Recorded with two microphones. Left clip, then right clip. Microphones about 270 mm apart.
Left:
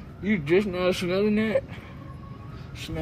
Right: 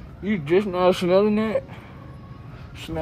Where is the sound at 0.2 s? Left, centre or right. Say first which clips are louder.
Right 2 dB; centre.